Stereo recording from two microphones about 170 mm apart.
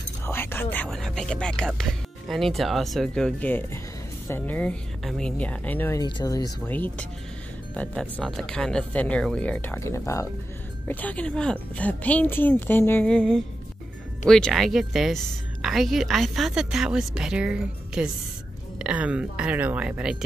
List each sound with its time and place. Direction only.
0.2 s a woman's voice: 15° left (ahead or behind)
5.9 s speech: 25° left (ahead or behind)
6.7 s a woman's voice: 10° left (ahead or behind)